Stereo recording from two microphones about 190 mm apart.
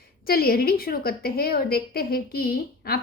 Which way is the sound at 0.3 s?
55° left (ahead or behind).